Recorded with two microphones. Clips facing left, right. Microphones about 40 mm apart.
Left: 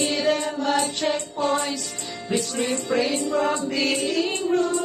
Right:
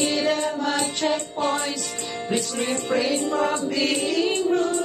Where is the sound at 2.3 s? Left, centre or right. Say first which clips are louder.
Left 1 dB; right.